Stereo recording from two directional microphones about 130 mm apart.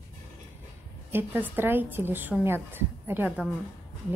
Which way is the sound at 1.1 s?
15° right (ahead or behind).